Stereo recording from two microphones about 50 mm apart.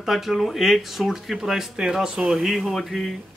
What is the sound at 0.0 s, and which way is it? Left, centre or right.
Speech, centre.